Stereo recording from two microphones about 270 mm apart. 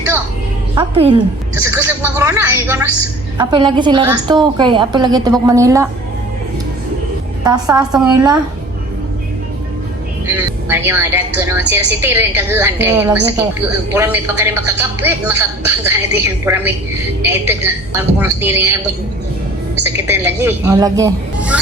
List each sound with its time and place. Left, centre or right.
0.8 s a woman's voice: centre
1.6 s a woman's voice: centre
7.4 s a woman's voice: centre
10.2 s a woman's voice: centre
19.8 s a woman's voice: centre